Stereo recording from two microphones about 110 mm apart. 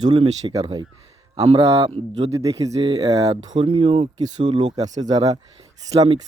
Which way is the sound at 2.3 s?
30° right (ahead or behind).